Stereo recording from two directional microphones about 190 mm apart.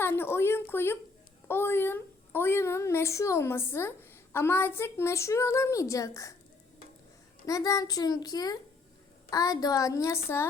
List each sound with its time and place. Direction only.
0.0 s a child's voice: 10° left (ahead or behind)
7.4 s a child's voice: 15° left (ahead or behind)